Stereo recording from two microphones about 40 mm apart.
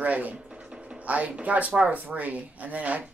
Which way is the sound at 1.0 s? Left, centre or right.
Right.